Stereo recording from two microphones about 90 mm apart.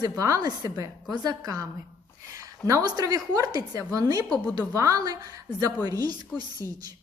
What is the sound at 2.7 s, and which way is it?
A woman's voice, 45° right (ahead or behind).